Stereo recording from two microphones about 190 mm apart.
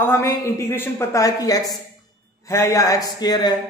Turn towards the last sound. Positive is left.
turn(degrees=20)  # may be behind; listen again after turning